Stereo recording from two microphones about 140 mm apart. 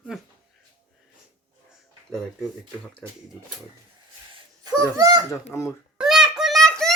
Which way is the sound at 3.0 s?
5° right (ahead or behind).